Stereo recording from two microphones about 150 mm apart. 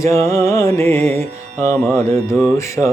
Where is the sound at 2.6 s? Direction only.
20° left (ahead or behind).